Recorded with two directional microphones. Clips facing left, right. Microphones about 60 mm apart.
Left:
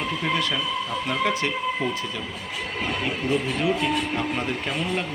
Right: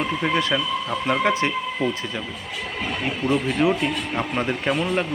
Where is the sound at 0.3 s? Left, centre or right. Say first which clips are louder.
Right 3 dB; right.